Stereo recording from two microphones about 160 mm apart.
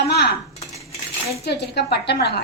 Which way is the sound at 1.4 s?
90° left.